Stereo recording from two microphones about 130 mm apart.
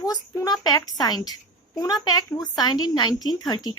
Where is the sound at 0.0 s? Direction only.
30° left (ahead or behind).